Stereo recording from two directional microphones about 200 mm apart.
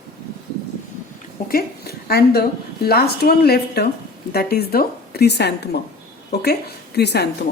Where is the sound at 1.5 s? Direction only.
50° left (ahead or behind).